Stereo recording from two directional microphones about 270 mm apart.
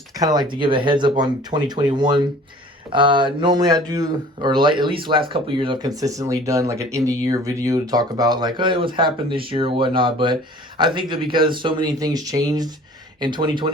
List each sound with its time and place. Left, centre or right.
0.2 s speech: centre